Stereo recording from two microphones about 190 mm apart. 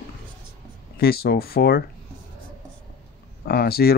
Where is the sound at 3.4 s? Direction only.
55° left (ahead or behind).